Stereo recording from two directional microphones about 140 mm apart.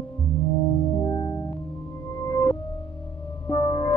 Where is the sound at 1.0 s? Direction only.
25° left (ahead or behind).